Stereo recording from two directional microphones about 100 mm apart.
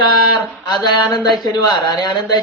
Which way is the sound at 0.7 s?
45° left (ahead or behind).